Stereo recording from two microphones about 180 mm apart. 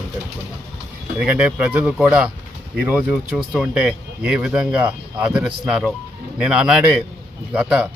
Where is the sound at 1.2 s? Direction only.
5° right (ahead or behind).